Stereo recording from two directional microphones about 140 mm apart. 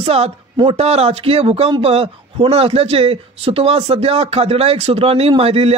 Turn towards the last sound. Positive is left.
turn(degrees=-45)  # may be behind; listen again after turning